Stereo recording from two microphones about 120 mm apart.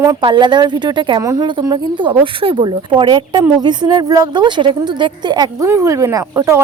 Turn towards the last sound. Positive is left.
turn(degrees=-25)  # may be behind; listen again after turning